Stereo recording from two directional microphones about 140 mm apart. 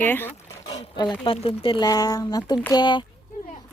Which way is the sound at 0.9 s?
30° left (ahead or behind).